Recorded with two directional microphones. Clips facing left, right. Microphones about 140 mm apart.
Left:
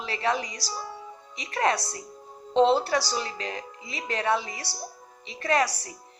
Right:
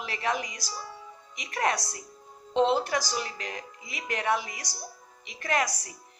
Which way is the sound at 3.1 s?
30° left (ahead or behind).